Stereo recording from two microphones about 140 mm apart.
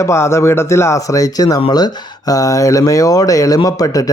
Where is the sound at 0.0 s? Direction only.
20° left (ahead or behind).